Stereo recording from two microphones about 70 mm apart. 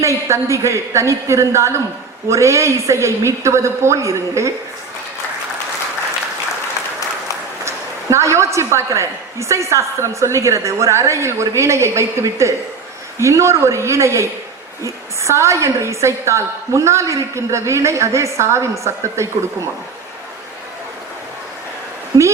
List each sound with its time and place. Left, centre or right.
0.0 s a woman's voice: right
8.1 s a woman's voice: right